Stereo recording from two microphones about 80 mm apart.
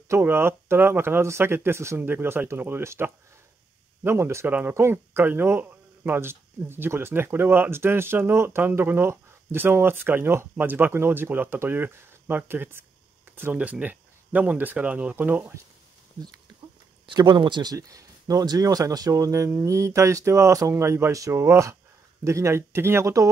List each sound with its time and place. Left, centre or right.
0.2 s speech: right
4.5 s speech: right
17.0 s speech: right
17.7 s speech: right